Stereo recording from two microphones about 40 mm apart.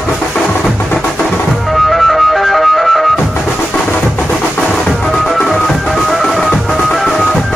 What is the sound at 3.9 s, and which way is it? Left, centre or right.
Music, left.